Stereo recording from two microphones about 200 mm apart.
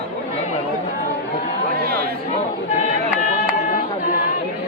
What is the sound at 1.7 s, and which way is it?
Speech, 50° right (ahead or behind).